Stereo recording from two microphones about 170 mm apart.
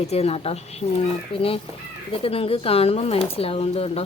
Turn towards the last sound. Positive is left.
turn(degrees=35)  # may be behind; listen again after turning